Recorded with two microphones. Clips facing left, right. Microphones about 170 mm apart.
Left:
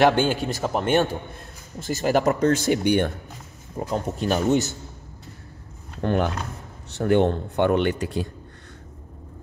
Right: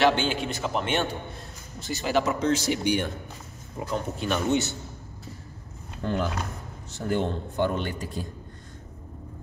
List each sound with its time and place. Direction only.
0.0 s speech: 45° left (ahead or behind)
3.8 s speech: 40° left (ahead or behind)
6.0 s speech: 65° left (ahead or behind)